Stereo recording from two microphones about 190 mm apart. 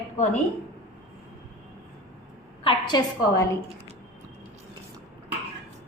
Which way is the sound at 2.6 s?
30° left (ahead or behind).